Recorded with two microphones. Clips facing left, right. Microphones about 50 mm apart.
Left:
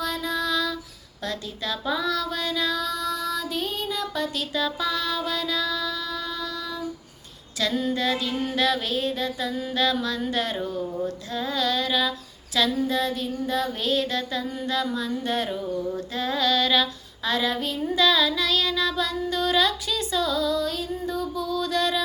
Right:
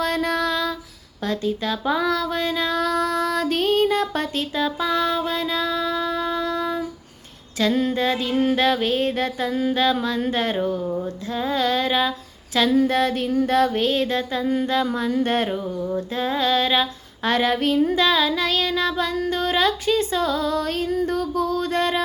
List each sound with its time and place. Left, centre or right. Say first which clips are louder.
0.0 s female singing: right 5 dB; right
7.6 s music: right 4 dB; right
11.0 s music: right 3 dB; right
16.0 s female singing: right 3 dB; right
17.2 s music: right 5 dB; right